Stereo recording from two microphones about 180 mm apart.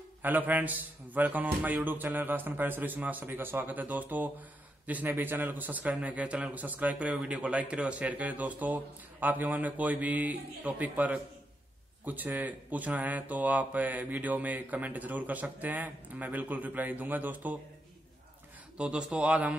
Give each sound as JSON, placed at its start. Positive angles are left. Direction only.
{"t": 0.2, "sound": "a man's voice", "side_deg": -10}
{"t": 18.8, "sound": "a man's voice", "side_deg": -5}